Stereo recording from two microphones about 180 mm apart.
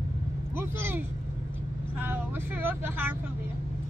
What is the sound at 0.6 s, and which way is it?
Speech, 10° right (ahead or behind).